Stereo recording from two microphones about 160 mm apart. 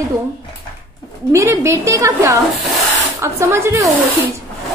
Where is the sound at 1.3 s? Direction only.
20° right (ahead or behind).